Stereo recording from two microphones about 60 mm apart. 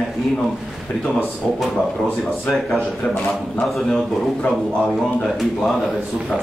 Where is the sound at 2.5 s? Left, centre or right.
Centre.